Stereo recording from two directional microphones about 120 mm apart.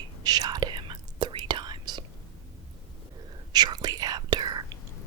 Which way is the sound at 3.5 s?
35° right (ahead or behind).